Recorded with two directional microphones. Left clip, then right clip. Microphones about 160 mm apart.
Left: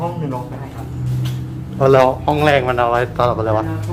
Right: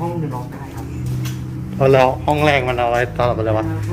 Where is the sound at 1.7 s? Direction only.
15° left (ahead or behind).